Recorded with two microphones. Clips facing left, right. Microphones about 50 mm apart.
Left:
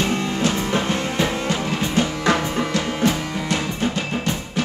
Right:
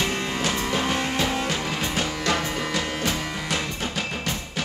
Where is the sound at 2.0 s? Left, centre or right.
Left.